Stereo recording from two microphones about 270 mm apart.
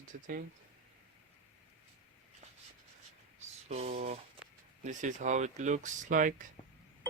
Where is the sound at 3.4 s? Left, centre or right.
Right.